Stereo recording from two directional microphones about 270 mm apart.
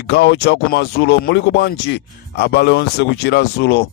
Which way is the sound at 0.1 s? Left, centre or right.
Left.